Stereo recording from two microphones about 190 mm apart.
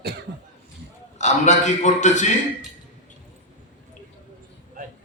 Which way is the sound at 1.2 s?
40° left (ahead or behind).